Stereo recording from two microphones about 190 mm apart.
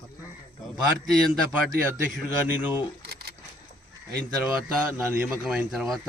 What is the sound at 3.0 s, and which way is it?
Camera, 55° right (ahead or behind).